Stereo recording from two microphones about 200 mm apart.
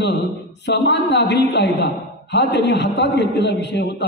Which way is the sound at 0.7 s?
60° left (ahead or behind).